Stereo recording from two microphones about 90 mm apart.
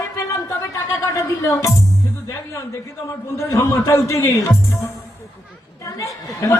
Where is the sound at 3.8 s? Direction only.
35° left (ahead or behind).